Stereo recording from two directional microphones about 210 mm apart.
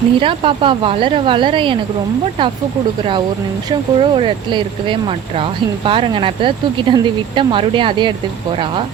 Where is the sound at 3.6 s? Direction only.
25° right (ahead or behind).